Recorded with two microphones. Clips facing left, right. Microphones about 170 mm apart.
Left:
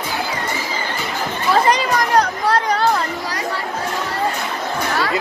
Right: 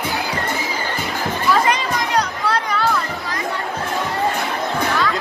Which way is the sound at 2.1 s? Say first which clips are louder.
Left 4 dB; 45° left (ahead or behind).